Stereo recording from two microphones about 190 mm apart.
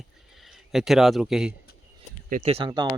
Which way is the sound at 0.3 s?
Centre (ahead or behind).